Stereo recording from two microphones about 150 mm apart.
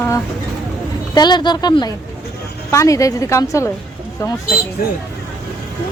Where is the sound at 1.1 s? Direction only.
30° left (ahead or behind).